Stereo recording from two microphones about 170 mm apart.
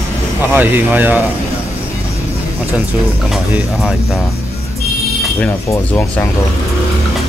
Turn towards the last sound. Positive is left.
turn(degrees=15)  # may be behind; listen again after turning